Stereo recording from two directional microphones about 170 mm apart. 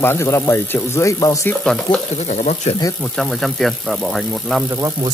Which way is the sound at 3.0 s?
Centre (ahead or behind).